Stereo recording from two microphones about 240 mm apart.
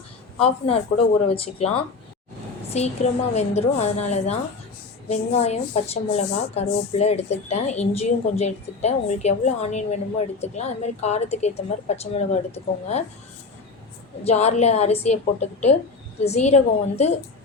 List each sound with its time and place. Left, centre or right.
0.3 s a woman's voice: left
14.3 s a woman's voice: left